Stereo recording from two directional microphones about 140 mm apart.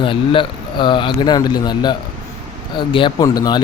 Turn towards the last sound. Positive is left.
turn(degrees=30)  # may be behind; listen again after turning